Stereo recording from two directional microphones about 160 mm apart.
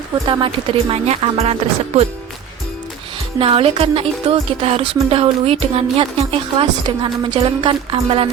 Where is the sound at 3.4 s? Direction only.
35° right (ahead or behind).